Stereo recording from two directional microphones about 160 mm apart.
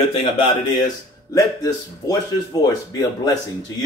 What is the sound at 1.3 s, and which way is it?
Speech, 20° left (ahead or behind).